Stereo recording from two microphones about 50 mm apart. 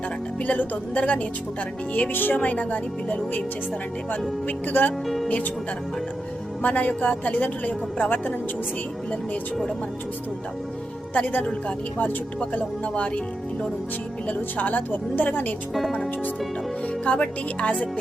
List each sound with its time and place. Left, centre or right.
0.4 s speech: left
4.4 s speech: left
5.0 s speech: centre
6.6 s speech: left
11.1 s speech: left
14.3 s speech: left
17.1 s speech: left